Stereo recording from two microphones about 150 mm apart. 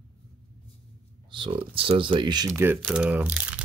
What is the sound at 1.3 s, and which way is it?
Speech, 35° right (ahead or behind).